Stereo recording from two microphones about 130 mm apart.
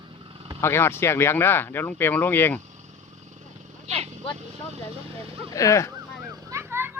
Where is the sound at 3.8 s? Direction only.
55° right (ahead or behind).